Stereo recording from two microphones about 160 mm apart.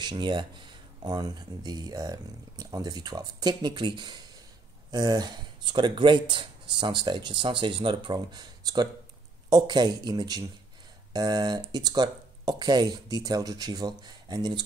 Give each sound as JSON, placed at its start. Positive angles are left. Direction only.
{"t": 0.0, "sound": "speech", "side_deg": -30}